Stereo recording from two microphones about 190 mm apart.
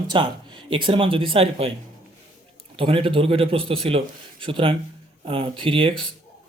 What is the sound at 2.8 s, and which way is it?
A man's voice, 30° right (ahead or behind).